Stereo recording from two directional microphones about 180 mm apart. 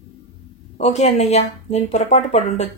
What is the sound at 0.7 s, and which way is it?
A woman's voice, 40° left (ahead or behind).